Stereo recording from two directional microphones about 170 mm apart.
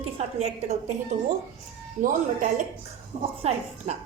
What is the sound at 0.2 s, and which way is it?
Speech, 35° right (ahead or behind).